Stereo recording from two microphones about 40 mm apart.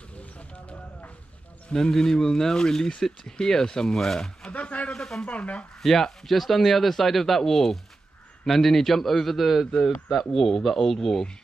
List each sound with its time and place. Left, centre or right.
1.7 s speech: centre
4.5 s speech: left
4.9 s speech: centre
5.2 s speech: left
5.8 s speech: centre